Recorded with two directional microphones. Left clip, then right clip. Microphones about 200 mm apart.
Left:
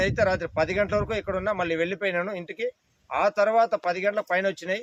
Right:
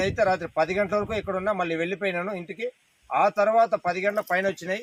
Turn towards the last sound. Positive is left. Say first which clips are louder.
# even
turn(degrees=25)  # may be behind; listen again after turning